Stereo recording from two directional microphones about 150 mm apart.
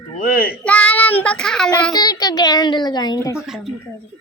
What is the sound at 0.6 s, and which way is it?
Child singing, 10° left (ahead or behind).